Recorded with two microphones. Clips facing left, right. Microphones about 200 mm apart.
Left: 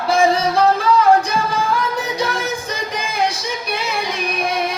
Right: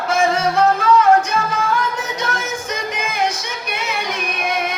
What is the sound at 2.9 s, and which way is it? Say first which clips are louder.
Music: left 1 dB; 35° left (ahead or behind).